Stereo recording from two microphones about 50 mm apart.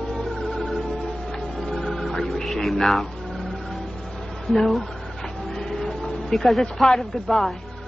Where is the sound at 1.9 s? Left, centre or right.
Centre.